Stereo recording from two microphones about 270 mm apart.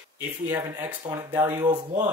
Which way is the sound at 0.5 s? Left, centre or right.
Centre.